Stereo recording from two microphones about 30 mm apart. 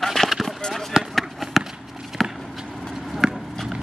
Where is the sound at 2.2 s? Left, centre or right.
Centre.